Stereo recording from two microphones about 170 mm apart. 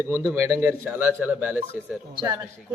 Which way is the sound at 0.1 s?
15° right (ahead or behind).